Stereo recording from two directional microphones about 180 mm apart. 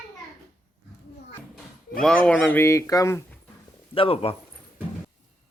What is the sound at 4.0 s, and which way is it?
Speech, 35° left (ahead or behind).